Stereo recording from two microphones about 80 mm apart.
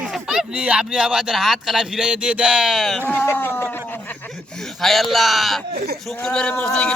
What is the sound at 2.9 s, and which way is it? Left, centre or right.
Speech, left.